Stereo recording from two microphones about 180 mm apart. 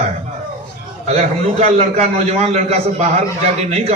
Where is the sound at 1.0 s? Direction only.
40° right (ahead or behind).